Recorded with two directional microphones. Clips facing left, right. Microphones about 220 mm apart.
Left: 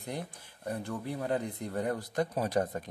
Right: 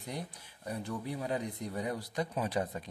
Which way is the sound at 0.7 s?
55° left (ahead or behind).